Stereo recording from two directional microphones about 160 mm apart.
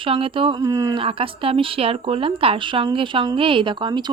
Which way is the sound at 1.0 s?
35° right (ahead or behind).